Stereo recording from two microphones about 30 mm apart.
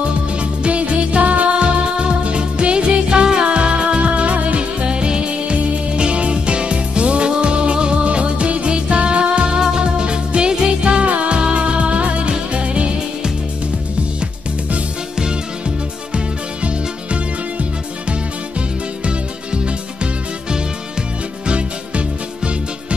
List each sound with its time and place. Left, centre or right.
0.0 s music: right
1.2 s music: right
1.6 s music: right
16.6 s music: right
19.0 s music: right